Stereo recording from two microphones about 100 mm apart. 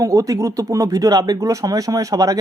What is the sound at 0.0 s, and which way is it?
Speech, 35° right (ahead or behind).